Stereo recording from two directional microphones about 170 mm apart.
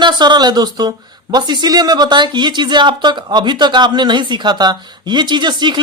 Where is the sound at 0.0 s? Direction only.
25° right (ahead or behind).